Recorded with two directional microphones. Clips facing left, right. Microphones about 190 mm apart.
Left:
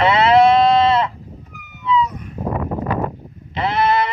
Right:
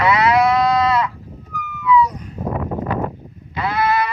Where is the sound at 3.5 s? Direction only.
25° left (ahead or behind).